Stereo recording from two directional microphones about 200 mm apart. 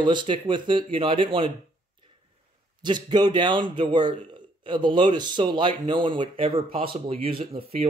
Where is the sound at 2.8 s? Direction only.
20° right (ahead or behind).